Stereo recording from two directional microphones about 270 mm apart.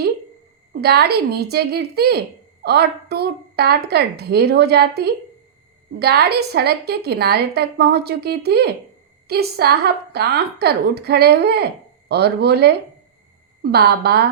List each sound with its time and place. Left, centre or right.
0.7 s a woman's voice: right